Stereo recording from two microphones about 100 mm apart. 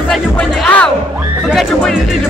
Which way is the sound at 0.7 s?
15° left (ahead or behind).